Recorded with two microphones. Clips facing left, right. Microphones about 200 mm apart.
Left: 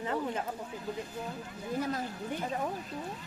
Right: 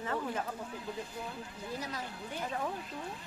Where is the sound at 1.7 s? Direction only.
50° left (ahead or behind).